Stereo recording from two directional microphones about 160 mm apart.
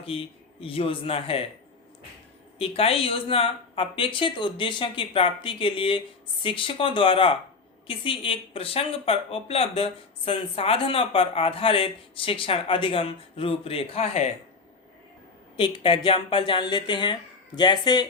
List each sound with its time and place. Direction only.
0.0 s speech: 35° left (ahead or behind)
2.6 s speech: 35° left (ahead or behind)
15.5 s speech: 30° left (ahead or behind)